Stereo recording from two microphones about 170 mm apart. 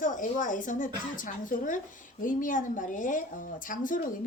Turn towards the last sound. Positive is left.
turn(degrees=50)  # may be behind; listen again after turning